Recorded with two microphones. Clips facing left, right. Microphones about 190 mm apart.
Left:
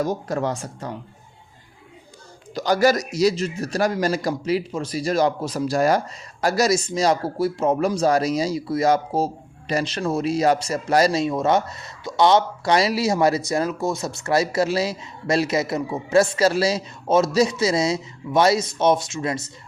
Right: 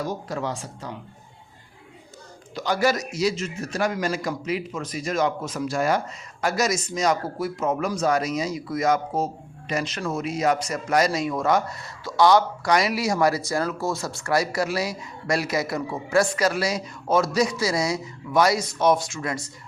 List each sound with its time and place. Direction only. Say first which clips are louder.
0.0 s speech: left 5 dB; 45° left (ahead or behind)
2.6 s a man's voice: left 4 dB; 40° left (ahead or behind); by 19.5 s 20° left (ahead or behind)